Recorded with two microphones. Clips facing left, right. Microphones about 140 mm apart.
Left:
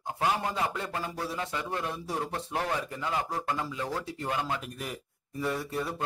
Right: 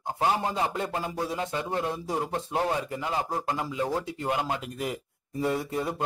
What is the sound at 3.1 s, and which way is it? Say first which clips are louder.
Speech: right 1 dB; 30° right (ahead or behind).